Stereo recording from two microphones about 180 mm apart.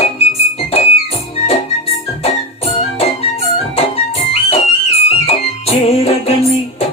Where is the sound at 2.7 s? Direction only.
35° left (ahead or behind).